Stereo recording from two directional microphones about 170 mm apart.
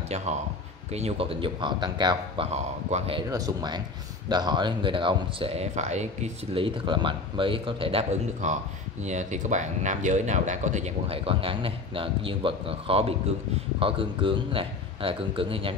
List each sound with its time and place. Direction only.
0.1 s speech: 40° right (ahead or behind)
3.2 s speech: 20° right (ahead or behind)